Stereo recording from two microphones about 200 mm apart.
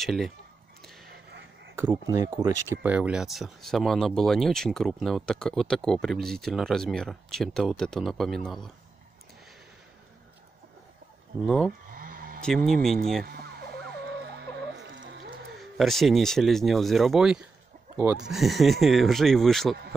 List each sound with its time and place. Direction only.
0.0 s speech: centre (ahead or behind)
1.8 s speech: 15° right (ahead or behind)
11.4 s speech: 5° left (ahead or behind)
11.9 s sheep: 45° right (ahead or behind)
12.4 s speech: 5° left (ahead or behind)
13.2 s music: 50° right (ahead or behind)
15.6 s speech: centre (ahead or behind)